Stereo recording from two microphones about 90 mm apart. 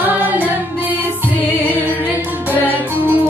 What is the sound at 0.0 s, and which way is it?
Music, 20° right (ahead or behind).